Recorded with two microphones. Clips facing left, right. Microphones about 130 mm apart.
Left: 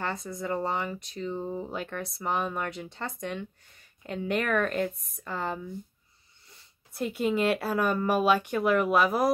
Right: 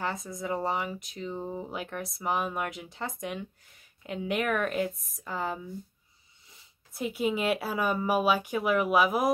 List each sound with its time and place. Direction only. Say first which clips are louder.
0.0 s speech: left 1 dB; centre (ahead or behind)
6.9 s speech: left 1 dB; centre (ahead or behind)